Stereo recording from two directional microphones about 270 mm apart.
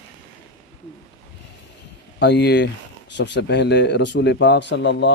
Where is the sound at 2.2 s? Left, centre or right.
Left.